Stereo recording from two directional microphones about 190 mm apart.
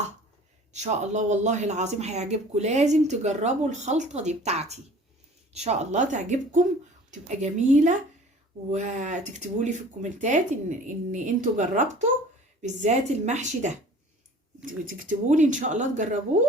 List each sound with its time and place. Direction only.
0.7 s speech: 35° right (ahead or behind)